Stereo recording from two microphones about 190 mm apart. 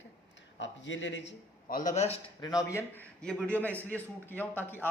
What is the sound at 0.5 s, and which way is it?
Speech, 75° left (ahead or behind).